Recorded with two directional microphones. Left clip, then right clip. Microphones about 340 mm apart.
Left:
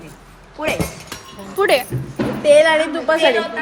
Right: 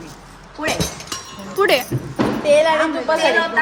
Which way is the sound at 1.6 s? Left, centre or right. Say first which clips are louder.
Even; centre.